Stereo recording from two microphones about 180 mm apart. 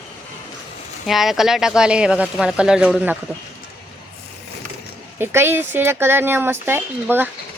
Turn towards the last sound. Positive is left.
turn(degrees=-10)  # may be behind; listen again after turning